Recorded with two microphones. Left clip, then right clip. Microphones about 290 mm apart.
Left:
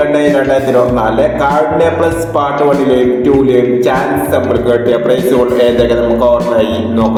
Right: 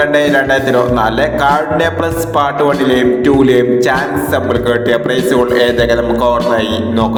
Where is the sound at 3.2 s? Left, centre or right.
Right.